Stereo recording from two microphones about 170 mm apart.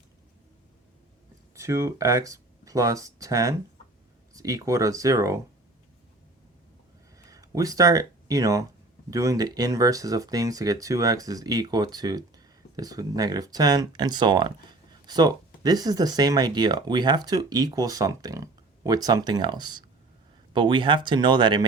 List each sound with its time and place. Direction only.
1.5 s speech: 15° right (ahead or behind)
7.2 s speech: 20° right (ahead or behind)